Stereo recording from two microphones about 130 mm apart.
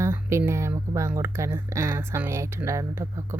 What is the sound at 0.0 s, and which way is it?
Speech, 20° right (ahead or behind).